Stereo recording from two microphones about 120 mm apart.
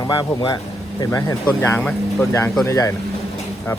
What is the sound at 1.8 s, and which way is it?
Speech, 5° left (ahead or behind).